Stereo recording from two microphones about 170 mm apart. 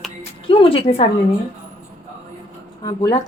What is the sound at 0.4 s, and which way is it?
Speech, 30° left (ahead or behind).